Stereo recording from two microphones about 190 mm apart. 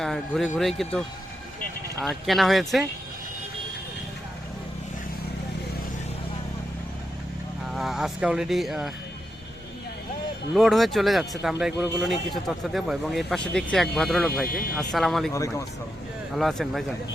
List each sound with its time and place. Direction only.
0.0 s speech: centre (ahead or behind)
7.7 s speech: centre (ahead or behind)
10.5 s speech: centre (ahead or behind)
14.4 s speech: 50° left (ahead or behind)
14.8 s speech: centre (ahead or behind)
15.3 s speech: 15° left (ahead or behind)
16.3 s speech: centre (ahead or behind)